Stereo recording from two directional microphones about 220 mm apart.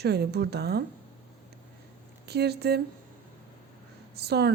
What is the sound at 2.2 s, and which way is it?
Speech, 45° right (ahead or behind).